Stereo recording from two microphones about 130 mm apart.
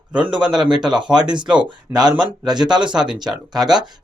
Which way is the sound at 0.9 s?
35° right (ahead or behind).